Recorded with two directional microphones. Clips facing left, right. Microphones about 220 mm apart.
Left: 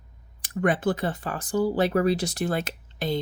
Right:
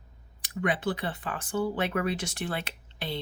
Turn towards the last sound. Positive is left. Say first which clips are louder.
# left 8 dB
turn(degrees=45)  # may be behind; listen again after turning